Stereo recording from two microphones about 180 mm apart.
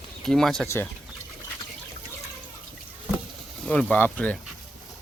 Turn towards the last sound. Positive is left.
turn(degrees=10)  # may be behind; listen again after turning